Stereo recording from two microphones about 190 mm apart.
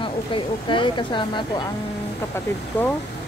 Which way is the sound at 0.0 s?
25° left (ahead or behind).